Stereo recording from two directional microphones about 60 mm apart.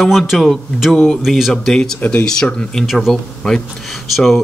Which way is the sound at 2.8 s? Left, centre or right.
Centre.